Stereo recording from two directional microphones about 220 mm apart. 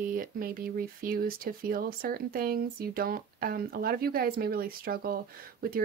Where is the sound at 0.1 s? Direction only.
40° right (ahead or behind).